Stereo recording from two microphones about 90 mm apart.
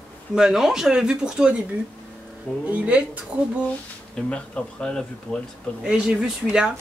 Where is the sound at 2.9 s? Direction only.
15° right (ahead or behind).